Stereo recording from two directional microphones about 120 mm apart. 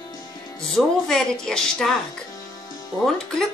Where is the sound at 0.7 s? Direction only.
5° left (ahead or behind).